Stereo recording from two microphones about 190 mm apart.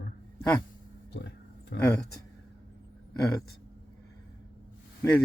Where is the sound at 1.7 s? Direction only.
55° left (ahead or behind).